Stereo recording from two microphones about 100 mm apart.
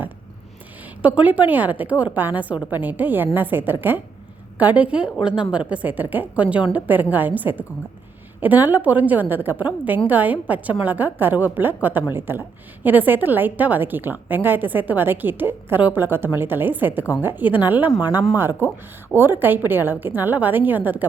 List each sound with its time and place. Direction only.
1.0 s a woman's voice: 15° right (ahead or behind)